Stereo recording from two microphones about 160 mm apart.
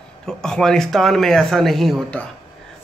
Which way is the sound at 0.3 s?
5° left (ahead or behind).